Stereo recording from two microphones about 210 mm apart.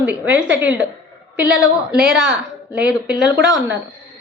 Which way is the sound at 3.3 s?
55° right (ahead or behind).